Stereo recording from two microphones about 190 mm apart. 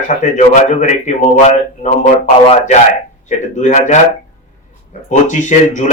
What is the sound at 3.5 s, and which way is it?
Speech, 40° left (ahead or behind).